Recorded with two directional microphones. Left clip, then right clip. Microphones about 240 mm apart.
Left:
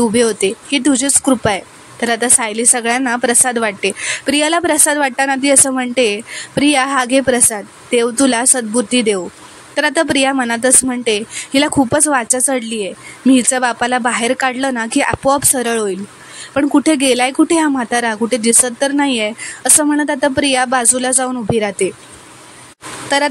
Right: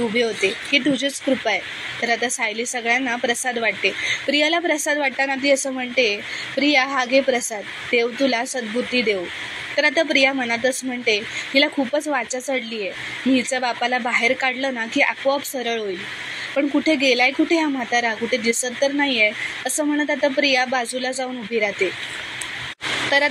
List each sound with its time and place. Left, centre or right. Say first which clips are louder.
0.1 s speech: left 6 dB; left
18.4 s speech: left 5 dB; left
18.9 s speech: right 2 dB; left